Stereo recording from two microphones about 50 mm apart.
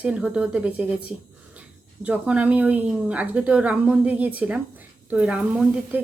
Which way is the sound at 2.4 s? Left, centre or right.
Right.